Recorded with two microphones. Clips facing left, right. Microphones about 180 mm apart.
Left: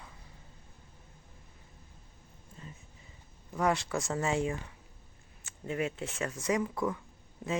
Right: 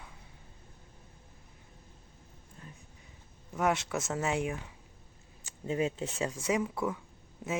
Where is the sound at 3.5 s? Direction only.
5° right (ahead or behind).